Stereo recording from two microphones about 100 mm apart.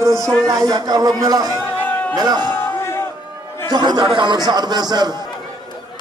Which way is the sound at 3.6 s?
45° right (ahead or behind).